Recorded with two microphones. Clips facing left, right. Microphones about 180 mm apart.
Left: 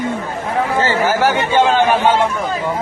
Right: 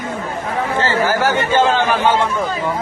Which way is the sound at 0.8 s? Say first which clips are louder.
Left 1 dB; 15° left (ahead or behind).